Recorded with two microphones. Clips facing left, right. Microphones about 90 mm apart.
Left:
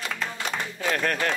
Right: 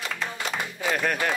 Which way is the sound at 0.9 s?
10° right (ahead or behind).